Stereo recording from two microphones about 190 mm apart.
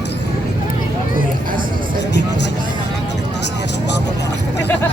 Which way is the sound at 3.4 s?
65° left (ahead or behind).